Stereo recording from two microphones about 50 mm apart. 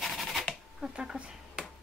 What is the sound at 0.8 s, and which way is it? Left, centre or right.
Speech, centre.